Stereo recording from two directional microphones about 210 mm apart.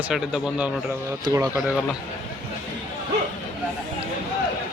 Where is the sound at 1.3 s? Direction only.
15° right (ahead or behind).